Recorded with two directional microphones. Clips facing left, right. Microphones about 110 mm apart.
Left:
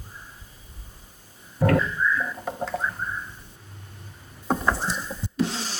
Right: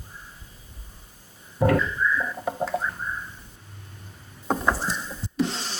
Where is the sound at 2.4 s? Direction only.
5° right (ahead or behind).